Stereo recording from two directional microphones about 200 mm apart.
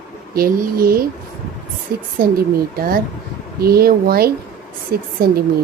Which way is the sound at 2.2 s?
50° right (ahead or behind).